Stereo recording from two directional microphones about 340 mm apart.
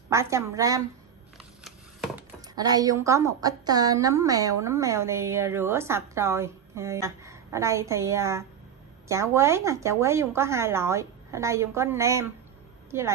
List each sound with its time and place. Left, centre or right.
0.1 s a woman's voice: centre
1.6 s a sound: centre
2.5 s a woman's voice: centre